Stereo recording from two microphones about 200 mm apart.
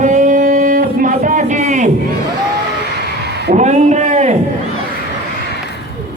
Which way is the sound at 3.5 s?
35° right (ahead or behind).